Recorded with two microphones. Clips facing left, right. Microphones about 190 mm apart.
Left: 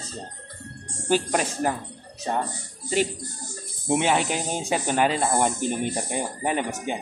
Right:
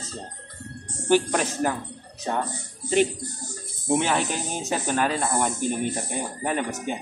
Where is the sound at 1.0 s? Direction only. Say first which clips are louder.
Right 2 dB; 10° left (ahead or behind).